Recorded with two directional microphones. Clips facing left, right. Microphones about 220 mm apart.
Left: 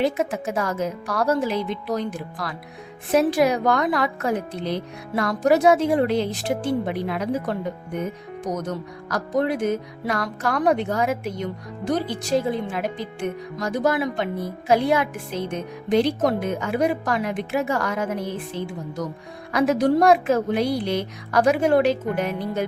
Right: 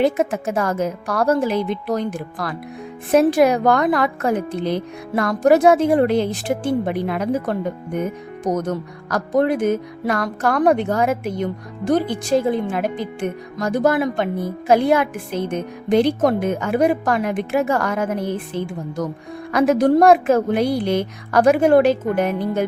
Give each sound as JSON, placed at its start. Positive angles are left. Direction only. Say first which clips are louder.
{"t": 0.0, "sound": "speech", "louder": "right 4 dB", "side_deg": -50}
{"t": 8.6, "sound": "speech", "louder": "right 4 dB", "side_deg": -50}
{"t": 19.5, "sound": "speech", "louder": "right 4 dB", "side_deg": -50}